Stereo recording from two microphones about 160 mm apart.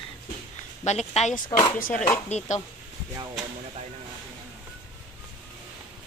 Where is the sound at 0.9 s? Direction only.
45° left (ahead or behind).